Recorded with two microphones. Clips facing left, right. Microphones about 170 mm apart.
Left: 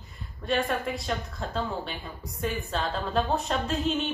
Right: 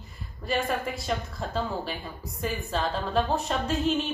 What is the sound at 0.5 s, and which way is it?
Speech, centre (ahead or behind).